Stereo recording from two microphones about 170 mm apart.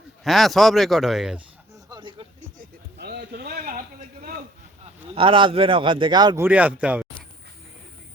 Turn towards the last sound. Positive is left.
turn(degrees=-10)  # may be behind; listen again after turning